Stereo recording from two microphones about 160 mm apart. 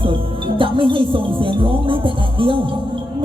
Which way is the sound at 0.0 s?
35° right (ahead or behind).